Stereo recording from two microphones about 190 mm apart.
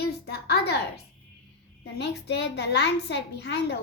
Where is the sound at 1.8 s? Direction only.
60° left (ahead or behind).